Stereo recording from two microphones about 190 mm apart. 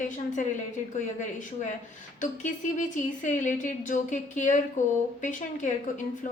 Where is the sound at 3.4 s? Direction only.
40° left (ahead or behind).